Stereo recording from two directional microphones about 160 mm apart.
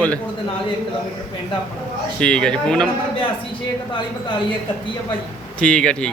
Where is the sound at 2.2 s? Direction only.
5° left (ahead or behind).